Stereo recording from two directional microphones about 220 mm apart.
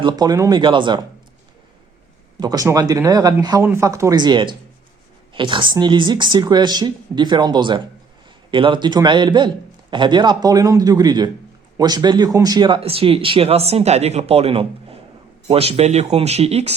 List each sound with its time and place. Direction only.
0.0 s speech: 15° right (ahead or behind)
2.4 s speech: 15° right (ahead or behind)